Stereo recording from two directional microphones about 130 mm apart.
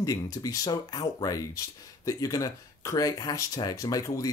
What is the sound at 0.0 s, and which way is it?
Speech, 25° left (ahead or behind).